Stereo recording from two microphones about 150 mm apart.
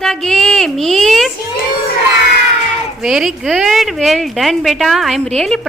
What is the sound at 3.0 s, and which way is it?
A woman's voice, 5° right (ahead or behind).